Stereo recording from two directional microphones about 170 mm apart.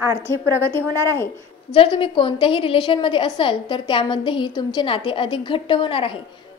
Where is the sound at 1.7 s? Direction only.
30° left (ahead or behind).